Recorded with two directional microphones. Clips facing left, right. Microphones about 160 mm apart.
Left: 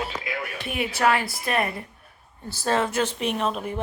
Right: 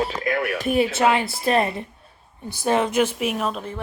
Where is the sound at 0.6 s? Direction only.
40° right (ahead or behind).